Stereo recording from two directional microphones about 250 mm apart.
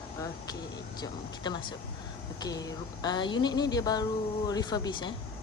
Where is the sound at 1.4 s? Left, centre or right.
Centre.